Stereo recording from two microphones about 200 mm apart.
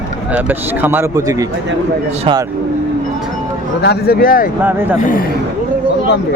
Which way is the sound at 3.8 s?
55° left (ahead or behind).